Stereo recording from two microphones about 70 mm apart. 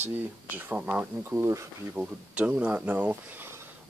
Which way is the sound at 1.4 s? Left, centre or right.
Right.